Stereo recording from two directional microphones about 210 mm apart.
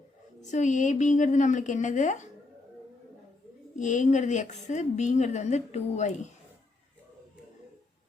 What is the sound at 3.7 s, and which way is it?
A woman's voice, 35° left (ahead or behind).